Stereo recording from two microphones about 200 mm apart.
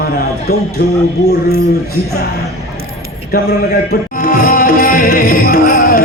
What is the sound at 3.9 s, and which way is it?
Music, 45° left (ahead or behind).